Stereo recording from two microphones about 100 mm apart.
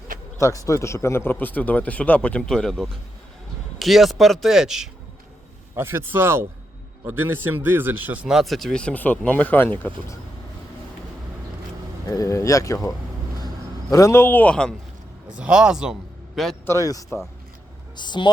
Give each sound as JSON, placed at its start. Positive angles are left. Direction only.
{"t": 0.3, "sound": "a man's voice", "side_deg": 30}
{"t": 5.7, "sound": "speech", "side_deg": -25}
{"t": 12.0, "sound": "speech", "side_deg": 35}
{"t": 13.9, "sound": "speech", "side_deg": 30}
{"t": 15.4, "sound": "a man's voice", "side_deg": -10}
{"t": 16.6, "sound": "speech", "side_deg": 35}
{"t": 17.9, "sound": "speech", "side_deg": 50}